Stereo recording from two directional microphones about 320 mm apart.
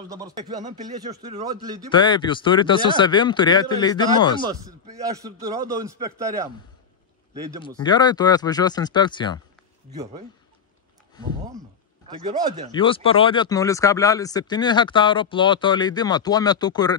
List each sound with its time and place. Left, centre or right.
0.1 s a man's voice: centre
1.9 s speech: centre
4.5 s a man's voice: centre
7.8 s speech: centre
12.4 s speech: right
12.7 s speech: centre